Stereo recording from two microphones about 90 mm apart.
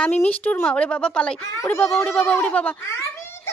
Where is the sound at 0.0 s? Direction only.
20° left (ahead or behind).